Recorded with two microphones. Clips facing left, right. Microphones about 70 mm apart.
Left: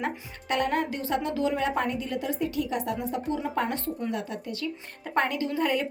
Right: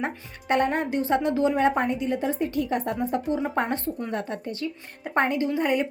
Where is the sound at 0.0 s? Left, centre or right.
Right.